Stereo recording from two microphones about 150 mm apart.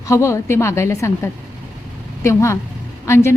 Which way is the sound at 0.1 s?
20° left (ahead or behind).